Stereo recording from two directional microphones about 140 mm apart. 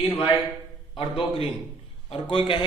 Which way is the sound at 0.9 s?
35° left (ahead or behind).